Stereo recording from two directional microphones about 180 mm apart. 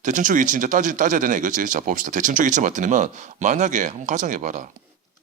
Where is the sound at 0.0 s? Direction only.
45° right (ahead or behind).